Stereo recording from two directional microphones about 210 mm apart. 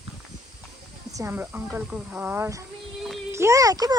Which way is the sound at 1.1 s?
10° right (ahead or behind).